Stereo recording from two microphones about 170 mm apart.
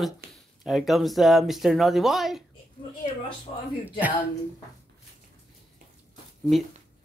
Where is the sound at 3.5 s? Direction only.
35° left (ahead or behind).